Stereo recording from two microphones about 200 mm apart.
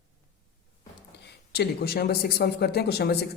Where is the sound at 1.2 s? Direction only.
55° left (ahead or behind).